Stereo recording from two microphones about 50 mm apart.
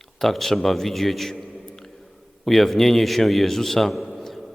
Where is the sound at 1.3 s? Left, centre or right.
Left.